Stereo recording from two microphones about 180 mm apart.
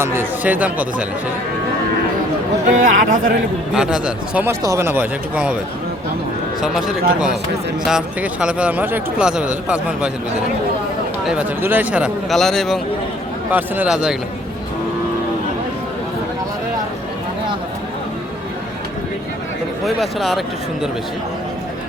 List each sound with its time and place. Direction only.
0.0 s speech: 15° right (ahead or behind)
2.6 s speech: 50° right (ahead or behind)
3.8 s speech: 5° right (ahead or behind)
6.6 s a man's voice: 5° right (ahead or behind)
11.3 s a man's voice: 10° right (ahead or behind)
13.5 s a man's voice: 10° right (ahead or behind)
19.8 s a man's voice: centre (ahead or behind)